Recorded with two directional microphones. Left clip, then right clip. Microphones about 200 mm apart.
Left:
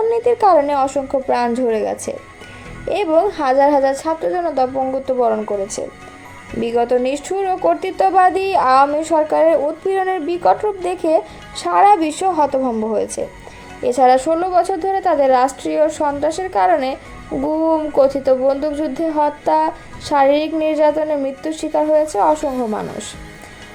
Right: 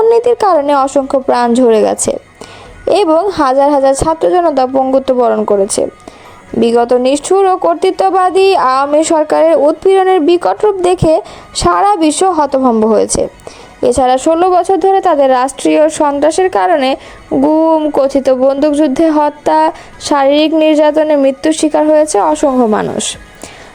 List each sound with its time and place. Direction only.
0.1 s speech: 40° right (ahead or behind)